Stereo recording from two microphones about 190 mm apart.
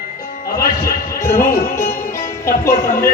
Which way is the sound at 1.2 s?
15° left (ahead or behind).